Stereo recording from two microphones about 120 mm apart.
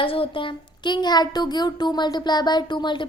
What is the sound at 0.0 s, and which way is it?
A child's voice, 50° left (ahead or behind).